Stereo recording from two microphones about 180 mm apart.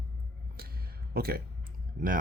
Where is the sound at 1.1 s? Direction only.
55° right (ahead or behind).